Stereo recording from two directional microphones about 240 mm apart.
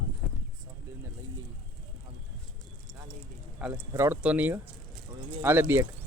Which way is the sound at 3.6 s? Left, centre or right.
Centre.